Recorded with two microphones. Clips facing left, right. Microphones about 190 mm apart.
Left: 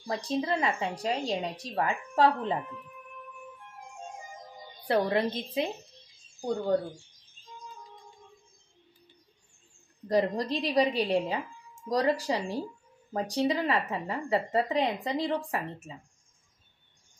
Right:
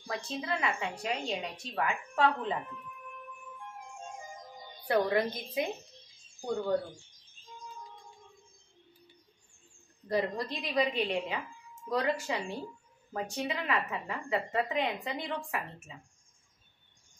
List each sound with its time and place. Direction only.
0.0 s speech: 35° left (ahead or behind)
4.8 s a woman's voice: 30° left (ahead or behind)
10.0 s speech: 40° left (ahead or behind)